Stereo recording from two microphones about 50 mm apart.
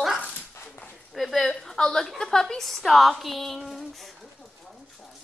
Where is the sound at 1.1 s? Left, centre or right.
Centre.